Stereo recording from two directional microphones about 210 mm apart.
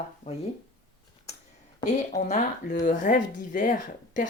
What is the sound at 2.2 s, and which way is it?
A woman's voice, 35° left (ahead or behind).